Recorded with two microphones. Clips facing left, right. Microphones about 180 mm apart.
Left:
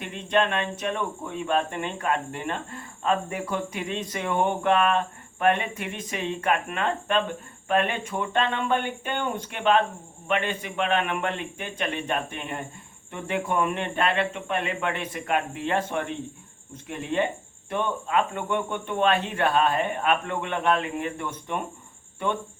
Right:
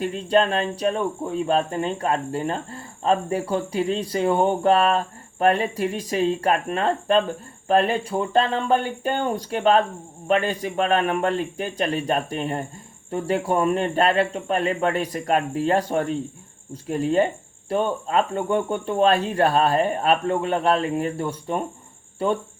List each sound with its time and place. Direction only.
0.0 s speech: 35° right (ahead or behind)